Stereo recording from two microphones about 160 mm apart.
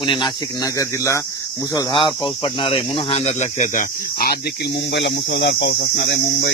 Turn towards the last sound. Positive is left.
turn(degrees=90)